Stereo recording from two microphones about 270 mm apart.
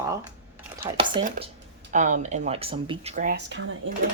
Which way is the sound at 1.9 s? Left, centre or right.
Right.